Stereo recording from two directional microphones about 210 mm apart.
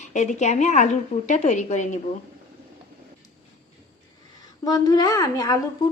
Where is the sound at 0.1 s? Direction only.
35° left (ahead or behind).